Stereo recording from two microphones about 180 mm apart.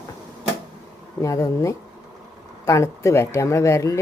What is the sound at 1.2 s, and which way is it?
Speech, 20° left (ahead or behind).